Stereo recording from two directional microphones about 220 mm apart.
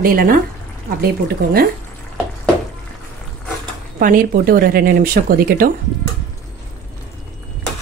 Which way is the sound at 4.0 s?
40° right (ahead or behind).